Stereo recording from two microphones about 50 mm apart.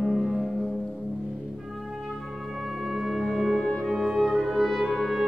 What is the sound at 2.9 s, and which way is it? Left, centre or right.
Brass instrument, centre.